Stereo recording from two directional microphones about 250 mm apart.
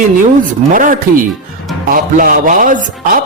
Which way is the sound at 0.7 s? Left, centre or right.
Right.